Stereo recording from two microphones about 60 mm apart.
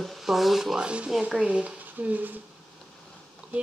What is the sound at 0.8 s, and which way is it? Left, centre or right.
Speech, centre.